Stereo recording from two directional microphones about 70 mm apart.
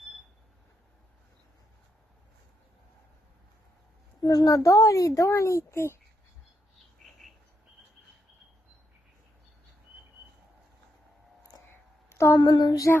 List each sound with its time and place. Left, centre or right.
4.2 s a woman's voice: left
11.7 s a sound: left
12.4 s child singing: left